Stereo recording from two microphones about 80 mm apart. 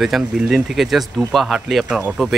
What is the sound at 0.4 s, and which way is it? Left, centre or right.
Speech, centre.